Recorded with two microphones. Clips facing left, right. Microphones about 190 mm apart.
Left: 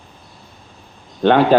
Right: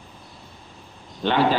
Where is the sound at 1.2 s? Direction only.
55° left (ahead or behind).